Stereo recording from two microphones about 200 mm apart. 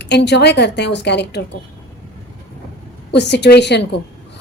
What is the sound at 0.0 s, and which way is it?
A woman's voice, 60° left (ahead or behind).